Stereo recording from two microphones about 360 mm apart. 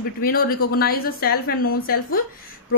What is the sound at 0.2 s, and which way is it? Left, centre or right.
Speech, left.